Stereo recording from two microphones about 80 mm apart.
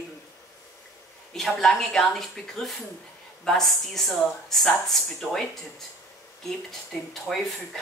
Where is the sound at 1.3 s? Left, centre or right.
Centre.